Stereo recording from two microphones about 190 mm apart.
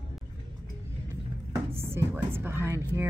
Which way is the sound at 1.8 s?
15° right (ahead or behind).